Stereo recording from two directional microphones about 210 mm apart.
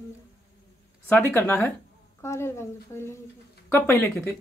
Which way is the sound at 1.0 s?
10° left (ahead or behind).